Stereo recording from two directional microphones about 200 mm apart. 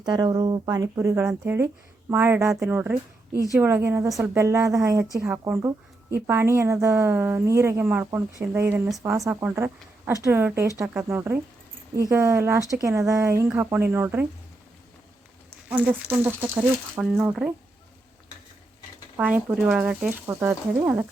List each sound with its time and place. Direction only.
0.0 s a woman's voice: 20° right (ahead or behind)
15.7 s a woman's voice: 10° right (ahead or behind)
19.1 s a woman's voice: 5° right (ahead or behind)